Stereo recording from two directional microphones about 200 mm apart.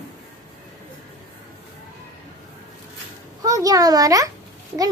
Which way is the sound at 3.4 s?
15° right (ahead or behind).